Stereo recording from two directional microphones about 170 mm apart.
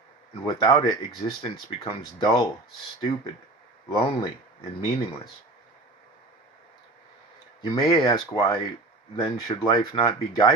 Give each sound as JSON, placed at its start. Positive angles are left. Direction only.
{"t": 0.4, "sound": "speech", "side_deg": 25}
{"t": 3.9, "sound": "speech", "side_deg": 30}
{"t": 7.6, "sound": "speech", "side_deg": 25}